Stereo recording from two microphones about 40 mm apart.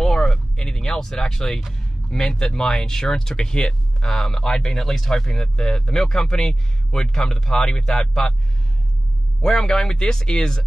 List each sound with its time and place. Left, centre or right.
0.0 s a sound: centre
1.7 s speech: centre
9.4 s speech: centre